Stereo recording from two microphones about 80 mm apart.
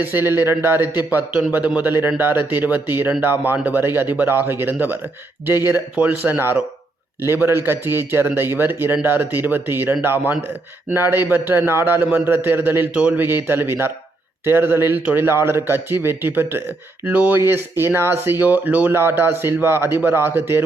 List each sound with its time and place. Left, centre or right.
0.0 s a man's voice: right
6.0 s a man's voice: right